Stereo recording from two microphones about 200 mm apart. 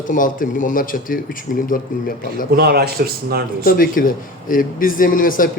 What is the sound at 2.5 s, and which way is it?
A man's voice, 50° right (ahead or behind).